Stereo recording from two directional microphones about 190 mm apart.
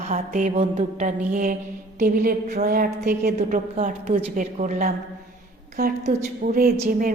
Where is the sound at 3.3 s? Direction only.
40° right (ahead or behind).